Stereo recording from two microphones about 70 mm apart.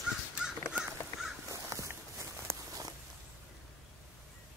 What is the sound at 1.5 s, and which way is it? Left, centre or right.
Crow, right.